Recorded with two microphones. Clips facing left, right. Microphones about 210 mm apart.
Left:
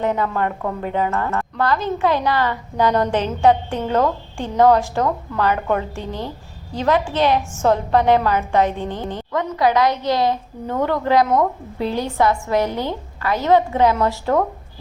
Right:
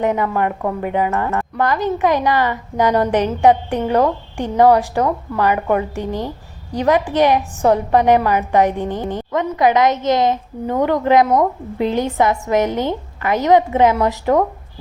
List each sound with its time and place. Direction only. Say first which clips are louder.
0.0 s a woman's voice: right 3 dB; 15° right (ahead or behind)